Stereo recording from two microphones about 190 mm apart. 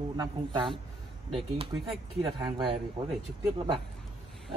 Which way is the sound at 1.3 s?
30° right (ahead or behind).